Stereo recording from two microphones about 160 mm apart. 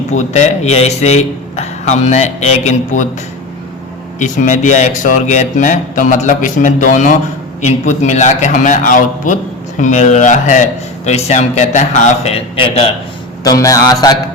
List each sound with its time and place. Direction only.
0.1 s a man's voice: 45° left (ahead or behind)
4.2 s a man's voice: 50° left (ahead or behind); by 12.9 s 35° left (ahead or behind)
13.4 s speech: 20° left (ahead or behind)